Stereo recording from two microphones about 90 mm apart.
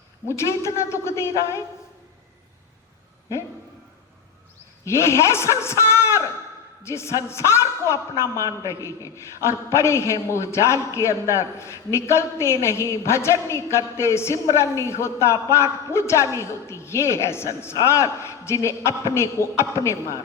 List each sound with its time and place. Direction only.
0.3 s a man's voice: 30° left (ahead or behind)
4.9 s a man's voice: 30° left (ahead or behind)